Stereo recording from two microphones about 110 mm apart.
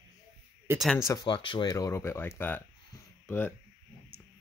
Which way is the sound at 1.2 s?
50° left (ahead or behind).